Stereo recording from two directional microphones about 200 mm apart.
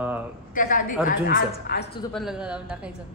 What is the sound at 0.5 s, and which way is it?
A woman's voice, 45° left (ahead or behind).